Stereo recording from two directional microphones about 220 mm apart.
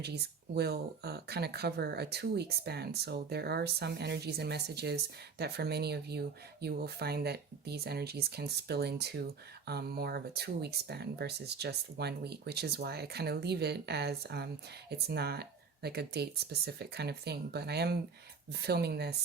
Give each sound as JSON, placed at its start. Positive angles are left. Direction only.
{"t": 0.0, "sound": "speech", "side_deg": -45}